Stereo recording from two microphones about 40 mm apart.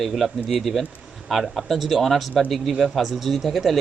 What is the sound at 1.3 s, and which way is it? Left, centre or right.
Speech, centre.